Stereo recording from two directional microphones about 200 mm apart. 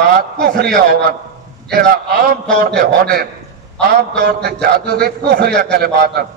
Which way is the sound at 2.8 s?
50° right (ahead or behind).